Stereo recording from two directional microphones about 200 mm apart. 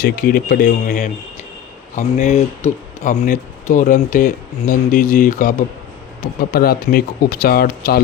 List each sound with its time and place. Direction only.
0.0 s speech: 45° left (ahead or behind)